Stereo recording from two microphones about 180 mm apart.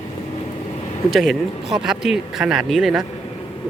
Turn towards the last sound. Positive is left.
turn(degrees=0)  # may be behind; listen again after turning